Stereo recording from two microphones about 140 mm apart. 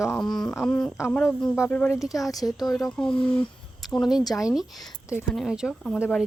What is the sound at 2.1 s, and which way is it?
Speech, 25° left (ahead or behind).